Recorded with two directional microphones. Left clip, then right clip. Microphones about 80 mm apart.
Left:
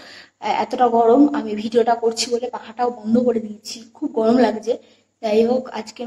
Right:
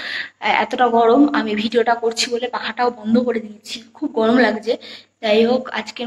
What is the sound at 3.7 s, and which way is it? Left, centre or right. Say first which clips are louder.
A woman's voice: right 2 dB; left.